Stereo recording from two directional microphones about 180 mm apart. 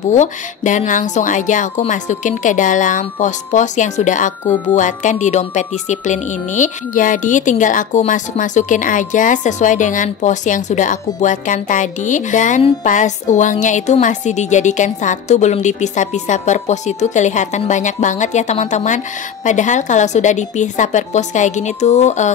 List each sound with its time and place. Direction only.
0.1 s a woman's voice: 40° left (ahead or behind)